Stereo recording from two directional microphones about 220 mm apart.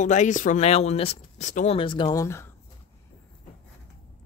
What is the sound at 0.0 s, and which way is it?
Speech, 35° left (ahead or behind).